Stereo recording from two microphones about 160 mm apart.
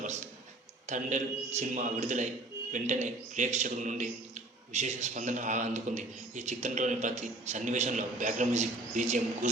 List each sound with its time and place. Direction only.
0.9 s a man's voice: 50° right (ahead or behind)